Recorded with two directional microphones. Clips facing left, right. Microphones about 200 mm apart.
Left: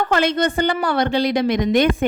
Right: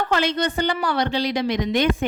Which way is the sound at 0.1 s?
50° left (ahead or behind).